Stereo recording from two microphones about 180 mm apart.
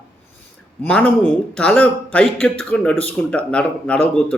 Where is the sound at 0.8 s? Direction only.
5° left (ahead or behind).